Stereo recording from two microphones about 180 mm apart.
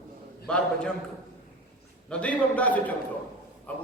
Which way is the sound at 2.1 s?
5° left (ahead or behind).